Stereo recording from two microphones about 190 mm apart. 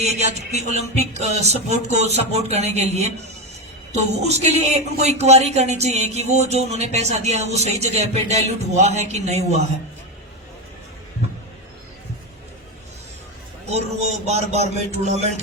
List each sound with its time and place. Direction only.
0.0 s speech: 35° right (ahead or behind)
13.7 s speech: 35° right (ahead or behind)